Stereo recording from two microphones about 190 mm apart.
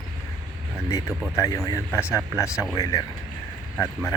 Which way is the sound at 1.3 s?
15° left (ahead or behind).